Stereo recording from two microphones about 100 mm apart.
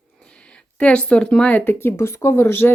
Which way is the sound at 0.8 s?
10° left (ahead or behind).